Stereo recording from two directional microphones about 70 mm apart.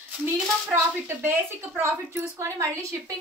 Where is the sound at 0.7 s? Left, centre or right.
Right.